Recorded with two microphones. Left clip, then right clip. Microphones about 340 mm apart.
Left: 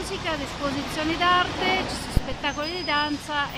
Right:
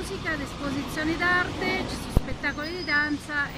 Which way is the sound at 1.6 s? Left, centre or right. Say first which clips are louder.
Left 4 dB; left.